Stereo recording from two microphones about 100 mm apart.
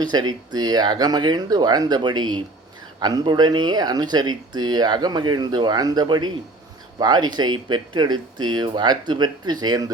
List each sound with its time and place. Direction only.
0.0 s speech: 45° right (ahead or behind)